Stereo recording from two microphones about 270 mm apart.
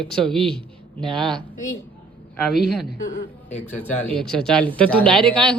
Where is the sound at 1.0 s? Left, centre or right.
Centre.